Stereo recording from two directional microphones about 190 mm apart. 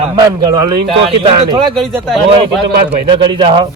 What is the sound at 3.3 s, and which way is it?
Speech, 25° right (ahead or behind).